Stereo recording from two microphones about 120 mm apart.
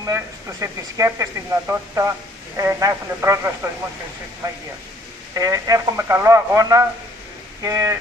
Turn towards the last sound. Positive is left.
turn(degrees=-25)  # may be behind; listen again after turning